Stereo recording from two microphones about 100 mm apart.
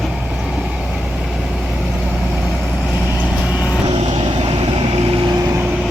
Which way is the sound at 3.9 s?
85° right.